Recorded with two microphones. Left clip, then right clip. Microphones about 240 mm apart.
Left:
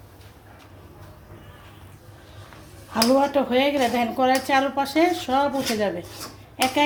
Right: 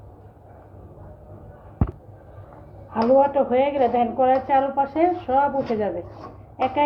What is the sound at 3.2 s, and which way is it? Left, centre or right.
Speech, left.